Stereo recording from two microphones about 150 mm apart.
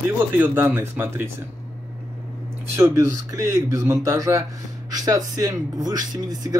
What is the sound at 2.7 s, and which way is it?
Speech, 20° right (ahead or behind).